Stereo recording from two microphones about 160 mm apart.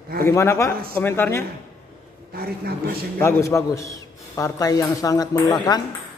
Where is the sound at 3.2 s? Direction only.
15° left (ahead or behind).